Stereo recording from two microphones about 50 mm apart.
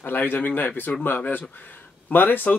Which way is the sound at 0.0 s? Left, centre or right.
Left.